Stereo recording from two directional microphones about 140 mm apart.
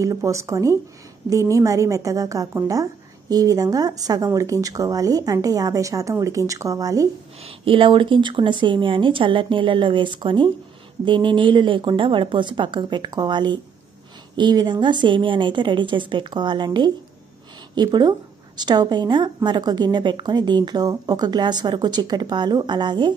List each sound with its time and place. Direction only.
0.0 s speech: 20° right (ahead or behind)
7.4 s a woman's voice: 40° right (ahead or behind)